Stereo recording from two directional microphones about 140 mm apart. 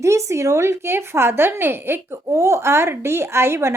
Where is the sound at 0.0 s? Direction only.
20° right (ahead or behind).